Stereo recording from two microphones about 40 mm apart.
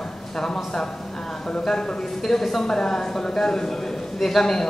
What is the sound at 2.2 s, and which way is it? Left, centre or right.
A woman's voice, centre.